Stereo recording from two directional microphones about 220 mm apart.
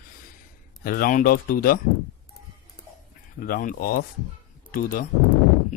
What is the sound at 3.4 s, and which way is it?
Speech, 40° left (ahead or behind).